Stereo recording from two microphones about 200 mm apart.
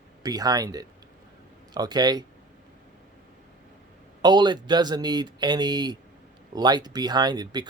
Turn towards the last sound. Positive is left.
turn(degrees=-20)  # may be behind; listen again after turning